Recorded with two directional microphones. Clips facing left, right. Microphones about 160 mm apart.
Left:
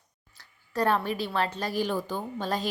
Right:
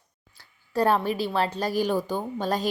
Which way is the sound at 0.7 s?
35° right (ahead or behind).